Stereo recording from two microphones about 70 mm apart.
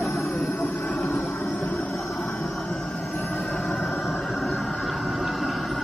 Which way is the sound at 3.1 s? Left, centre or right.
Left.